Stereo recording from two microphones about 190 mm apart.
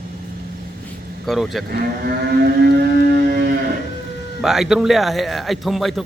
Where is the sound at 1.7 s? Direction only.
55° right (ahead or behind).